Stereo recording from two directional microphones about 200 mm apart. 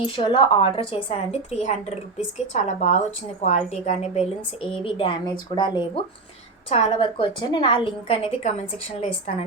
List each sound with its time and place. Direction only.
0.0 s a woman's voice: 25° left (ahead or behind)